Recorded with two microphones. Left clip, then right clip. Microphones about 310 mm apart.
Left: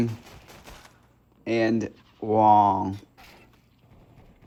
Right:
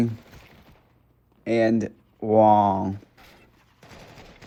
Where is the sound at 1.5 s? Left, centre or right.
Right.